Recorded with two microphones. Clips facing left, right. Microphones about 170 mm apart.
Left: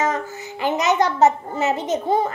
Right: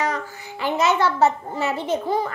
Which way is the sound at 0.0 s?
20° left (ahead or behind).